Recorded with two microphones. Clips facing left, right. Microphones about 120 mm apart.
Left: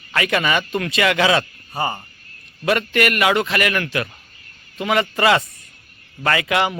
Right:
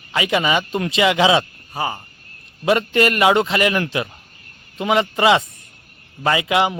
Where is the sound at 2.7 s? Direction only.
25° right (ahead or behind).